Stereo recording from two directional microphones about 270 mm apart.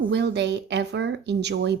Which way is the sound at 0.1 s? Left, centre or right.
Right.